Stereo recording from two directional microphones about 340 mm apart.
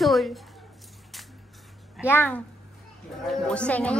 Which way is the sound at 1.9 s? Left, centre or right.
Centre.